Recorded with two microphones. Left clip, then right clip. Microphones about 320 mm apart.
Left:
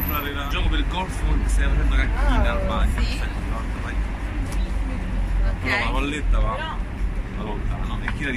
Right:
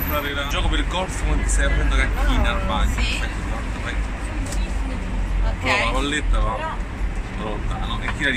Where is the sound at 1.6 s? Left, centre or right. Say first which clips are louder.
Right 5 dB; centre.